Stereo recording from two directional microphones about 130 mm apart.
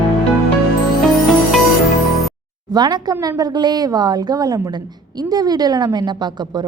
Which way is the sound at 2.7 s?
35° right (ahead or behind).